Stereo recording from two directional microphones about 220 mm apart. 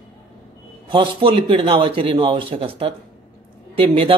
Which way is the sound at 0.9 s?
25° right (ahead or behind).